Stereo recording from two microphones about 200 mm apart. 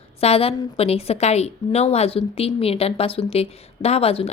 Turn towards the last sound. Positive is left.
turn(degrees=30)  # may be behind; listen again after turning